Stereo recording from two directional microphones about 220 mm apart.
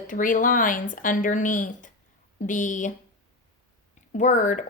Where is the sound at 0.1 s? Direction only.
35° left (ahead or behind).